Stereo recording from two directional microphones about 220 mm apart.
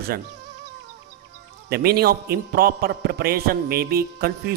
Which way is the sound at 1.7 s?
45° right (ahead or behind).